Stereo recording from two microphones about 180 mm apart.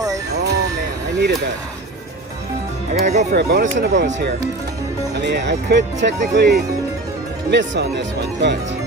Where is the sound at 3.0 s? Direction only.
40° right (ahead or behind).